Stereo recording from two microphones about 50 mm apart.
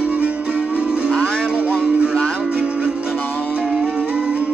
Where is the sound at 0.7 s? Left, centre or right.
Centre.